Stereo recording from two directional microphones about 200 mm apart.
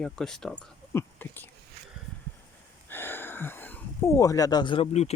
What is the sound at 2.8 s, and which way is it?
Speech, 10° left (ahead or behind).